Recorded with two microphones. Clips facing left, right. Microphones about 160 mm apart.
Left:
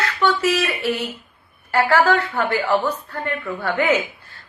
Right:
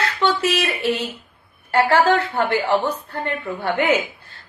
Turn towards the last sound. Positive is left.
turn(degrees=-25)  # may be behind; listen again after turning